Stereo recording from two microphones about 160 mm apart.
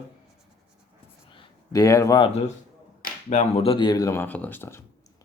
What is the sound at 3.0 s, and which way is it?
Speech, 50° left (ahead or behind).